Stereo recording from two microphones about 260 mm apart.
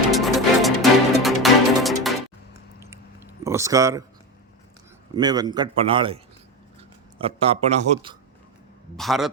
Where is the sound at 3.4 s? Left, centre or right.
Centre.